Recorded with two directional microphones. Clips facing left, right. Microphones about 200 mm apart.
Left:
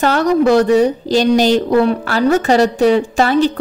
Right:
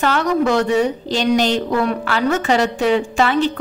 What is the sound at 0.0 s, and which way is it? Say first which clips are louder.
A woman's voice: left 4 dB; 35° left (ahead or behind).